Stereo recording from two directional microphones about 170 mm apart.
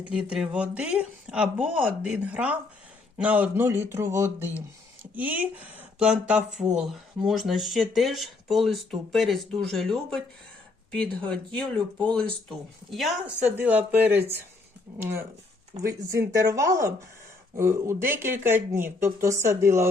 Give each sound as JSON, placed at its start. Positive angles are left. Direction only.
{"t": 0.1, "sound": "speech", "side_deg": -5}
{"t": 12.1, "sound": "speech", "side_deg": 0}